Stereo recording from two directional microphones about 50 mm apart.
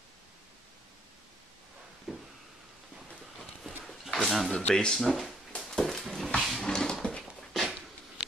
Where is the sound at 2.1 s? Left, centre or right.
Centre.